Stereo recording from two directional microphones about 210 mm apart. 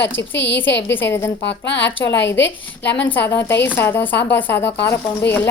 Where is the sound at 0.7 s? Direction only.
55° left (ahead or behind).